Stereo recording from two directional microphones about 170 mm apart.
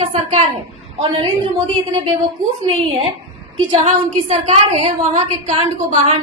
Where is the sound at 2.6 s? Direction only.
35° right (ahead or behind).